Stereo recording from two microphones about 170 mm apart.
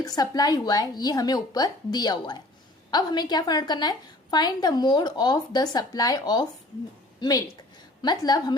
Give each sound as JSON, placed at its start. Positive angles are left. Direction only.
{"t": 0.0, "sound": "a woman's voice", "side_deg": 20}